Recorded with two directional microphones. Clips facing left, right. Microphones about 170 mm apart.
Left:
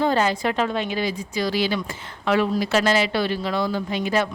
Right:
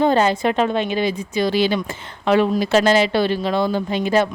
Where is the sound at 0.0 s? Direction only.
25° right (ahead or behind).